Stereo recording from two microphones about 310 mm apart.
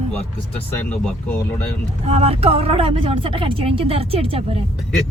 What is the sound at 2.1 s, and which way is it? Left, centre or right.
Speech, centre.